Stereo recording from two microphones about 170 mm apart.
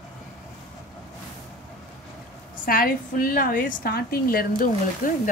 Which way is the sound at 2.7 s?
55° left (ahead or behind).